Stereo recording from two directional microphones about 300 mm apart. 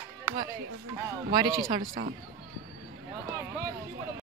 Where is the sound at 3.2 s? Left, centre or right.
Centre.